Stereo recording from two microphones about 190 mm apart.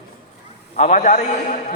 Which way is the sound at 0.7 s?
40° left (ahead or behind).